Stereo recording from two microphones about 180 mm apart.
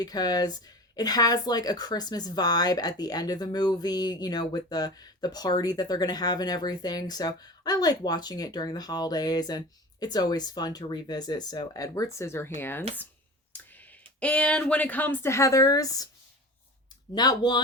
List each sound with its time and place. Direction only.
0.0 s speech: 20° left (ahead or behind)
17.2 s speech: 25° left (ahead or behind)